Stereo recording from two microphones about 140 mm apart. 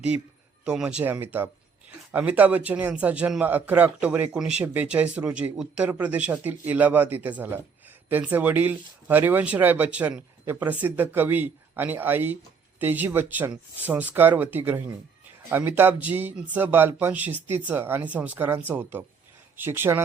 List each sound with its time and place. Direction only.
0.6 s speech: 5° right (ahead or behind)